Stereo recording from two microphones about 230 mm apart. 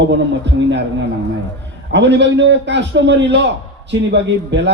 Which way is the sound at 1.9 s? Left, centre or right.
Right.